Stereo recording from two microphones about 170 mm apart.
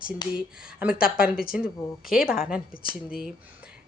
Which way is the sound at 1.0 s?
60° left (ahead or behind).